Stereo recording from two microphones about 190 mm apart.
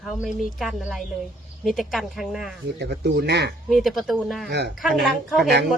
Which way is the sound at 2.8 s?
60° right (ahead or behind).